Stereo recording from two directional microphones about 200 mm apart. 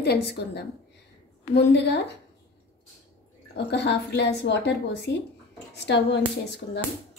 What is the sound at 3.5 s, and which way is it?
A woman's voice, 60° left (ahead or behind).